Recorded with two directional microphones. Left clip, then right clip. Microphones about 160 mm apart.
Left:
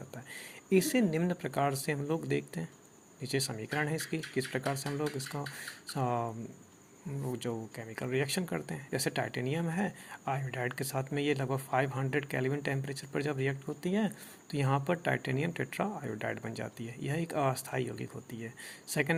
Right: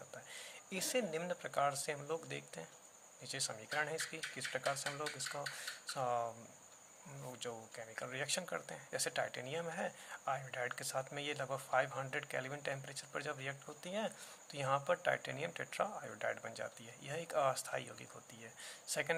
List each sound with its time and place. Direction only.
0.3 s speech: 20° left (ahead or behind)
4.9 s speech: 5° left (ahead or behind)
5.1 s speech: 15° left (ahead or behind)